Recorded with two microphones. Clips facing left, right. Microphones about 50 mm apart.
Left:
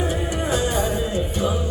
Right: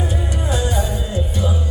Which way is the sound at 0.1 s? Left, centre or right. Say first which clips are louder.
Left 1 dB; left.